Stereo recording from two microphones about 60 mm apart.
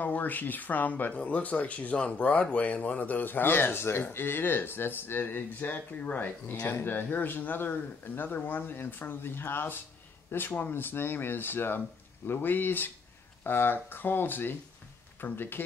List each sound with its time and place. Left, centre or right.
0.0 s speech: left
6.7 s speech: left